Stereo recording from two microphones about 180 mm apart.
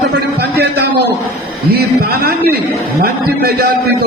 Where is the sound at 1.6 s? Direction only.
60° right (ahead or behind).